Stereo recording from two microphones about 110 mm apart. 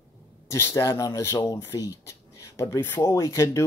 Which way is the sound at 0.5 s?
25° left (ahead or behind).